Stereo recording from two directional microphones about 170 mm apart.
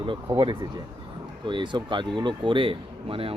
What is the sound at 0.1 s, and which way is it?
Speech, 30° right (ahead or behind).